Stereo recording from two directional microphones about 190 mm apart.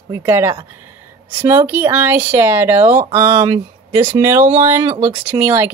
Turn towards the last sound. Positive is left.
turn(degrees=-10)  # may be behind; listen again after turning